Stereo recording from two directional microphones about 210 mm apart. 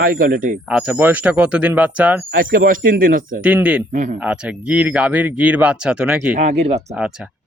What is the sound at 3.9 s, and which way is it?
Speech, 35° right (ahead or behind).